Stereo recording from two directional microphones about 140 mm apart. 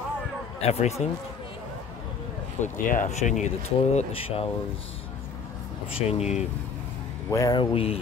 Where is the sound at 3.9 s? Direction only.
45° left (ahead or behind).